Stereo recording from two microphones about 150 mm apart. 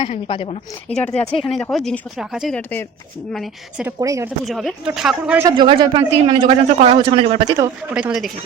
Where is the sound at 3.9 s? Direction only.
20° right (ahead or behind).